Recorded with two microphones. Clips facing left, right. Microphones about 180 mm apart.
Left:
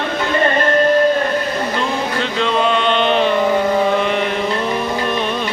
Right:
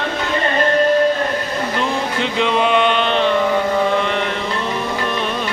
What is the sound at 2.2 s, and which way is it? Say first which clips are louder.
Chant: right 1 dB; 15° right (ahead or behind).